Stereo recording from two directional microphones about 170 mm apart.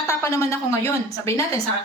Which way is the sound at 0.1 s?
15° left (ahead or behind).